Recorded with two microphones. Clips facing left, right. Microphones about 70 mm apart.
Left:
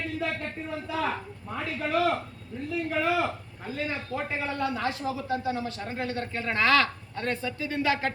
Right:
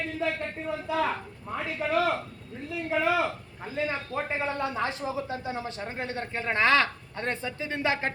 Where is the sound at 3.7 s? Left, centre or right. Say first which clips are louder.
Right 2 dB; right.